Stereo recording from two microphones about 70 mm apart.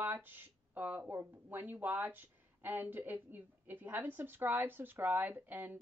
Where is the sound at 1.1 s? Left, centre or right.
Right.